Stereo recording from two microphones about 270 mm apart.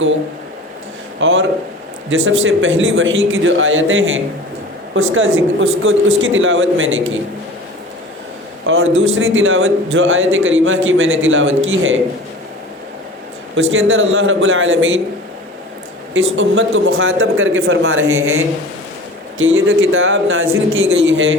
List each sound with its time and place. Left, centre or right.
1.2 s a man's voice: right
8.6 s a man's voice: right
13.6 s a man's voice: right
16.1 s a man's voice: right